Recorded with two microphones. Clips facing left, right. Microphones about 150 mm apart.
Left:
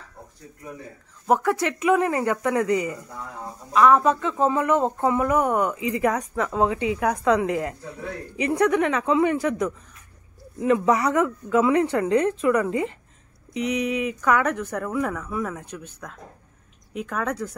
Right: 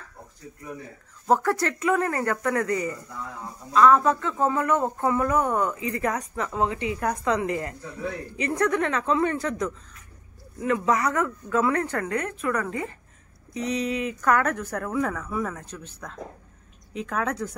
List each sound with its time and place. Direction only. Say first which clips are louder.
1.2 s speech: left 1 dB; 15° left (ahead or behind)